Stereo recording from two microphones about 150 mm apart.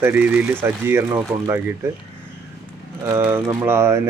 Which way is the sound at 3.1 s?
15° right (ahead or behind).